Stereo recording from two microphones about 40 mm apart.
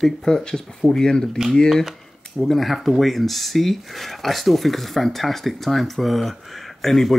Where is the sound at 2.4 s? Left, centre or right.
Centre.